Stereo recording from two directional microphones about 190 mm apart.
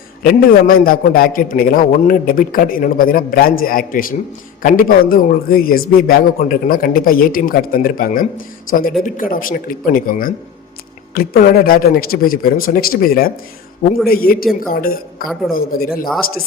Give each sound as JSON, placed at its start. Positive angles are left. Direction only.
{"t": 0.2, "sound": "a man's voice", "side_deg": 50}